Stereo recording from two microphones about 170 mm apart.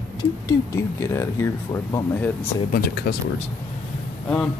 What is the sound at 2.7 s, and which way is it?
Speech, 65° left (ahead or behind).